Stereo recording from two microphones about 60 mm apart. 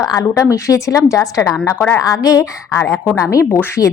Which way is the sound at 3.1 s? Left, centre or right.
Left.